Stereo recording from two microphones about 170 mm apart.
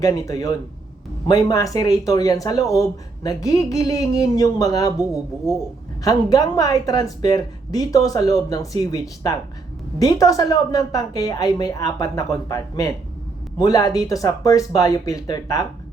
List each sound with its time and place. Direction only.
0.0 s a woman's voice: 20° left (ahead or behind)